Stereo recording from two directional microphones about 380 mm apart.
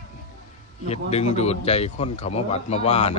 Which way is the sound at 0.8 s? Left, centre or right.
Centre.